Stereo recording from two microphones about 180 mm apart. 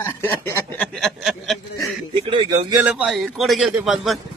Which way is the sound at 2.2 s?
25° right (ahead or behind).